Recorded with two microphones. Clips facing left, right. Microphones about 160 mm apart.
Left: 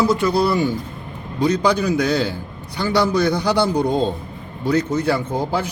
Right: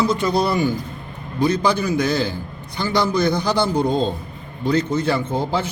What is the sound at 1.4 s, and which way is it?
A man's voice, 15° left (ahead or behind).